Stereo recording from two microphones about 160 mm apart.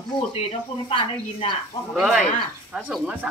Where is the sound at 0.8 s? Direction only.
35° left (ahead or behind).